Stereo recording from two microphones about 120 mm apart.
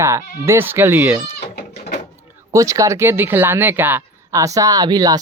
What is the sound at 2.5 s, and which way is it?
Speech, 25° right (ahead or behind).